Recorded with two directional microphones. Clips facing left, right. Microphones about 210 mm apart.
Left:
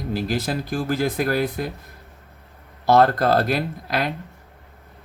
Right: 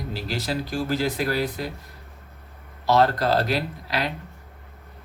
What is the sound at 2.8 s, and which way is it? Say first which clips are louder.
Speech: left 3 dB; 50° left (ahead or behind).